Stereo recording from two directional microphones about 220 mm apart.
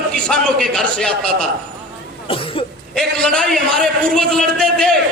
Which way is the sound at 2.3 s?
25° left (ahead or behind).